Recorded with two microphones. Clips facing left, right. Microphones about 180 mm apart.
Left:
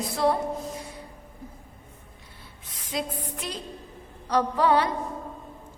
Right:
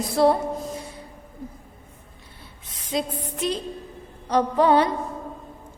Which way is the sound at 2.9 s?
25° right (ahead or behind).